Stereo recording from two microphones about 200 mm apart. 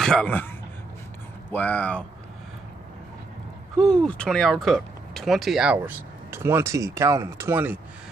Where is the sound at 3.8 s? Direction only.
5° left (ahead or behind).